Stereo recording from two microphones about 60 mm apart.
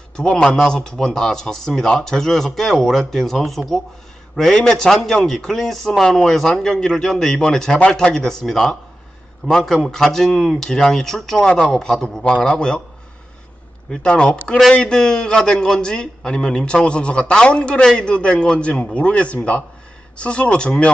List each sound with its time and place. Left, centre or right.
0.1 s a man's voice: centre
14.0 s a man's voice: centre